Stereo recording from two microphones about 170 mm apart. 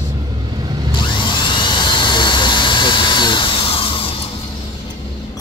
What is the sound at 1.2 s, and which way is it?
Helicopter, 25° left (ahead or behind).